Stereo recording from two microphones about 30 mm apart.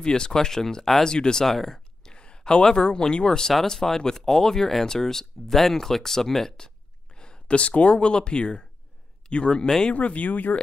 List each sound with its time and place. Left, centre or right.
0.0 s speech: left
1.4 s speech: centre
2.0 s a sound: left
3.3 s speech: left
7.2 s speech: left
9.9 s speech: left